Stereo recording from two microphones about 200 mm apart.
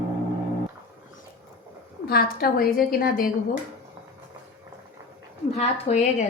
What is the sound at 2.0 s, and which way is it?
A woman's voice, 50° left (ahead or behind).